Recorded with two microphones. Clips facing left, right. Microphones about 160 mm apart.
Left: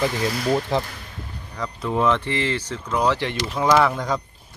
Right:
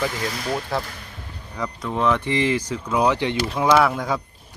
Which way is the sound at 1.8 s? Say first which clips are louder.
Left 2 dB; 5° left (ahead or behind).